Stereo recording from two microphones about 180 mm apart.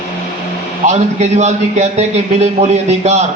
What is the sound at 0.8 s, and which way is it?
A man's voice, 40° right (ahead or behind).